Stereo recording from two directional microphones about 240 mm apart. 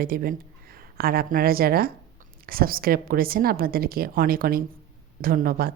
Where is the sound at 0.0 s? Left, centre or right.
Right.